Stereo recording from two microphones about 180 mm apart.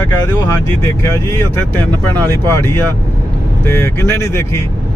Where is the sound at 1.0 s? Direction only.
15° left (ahead or behind).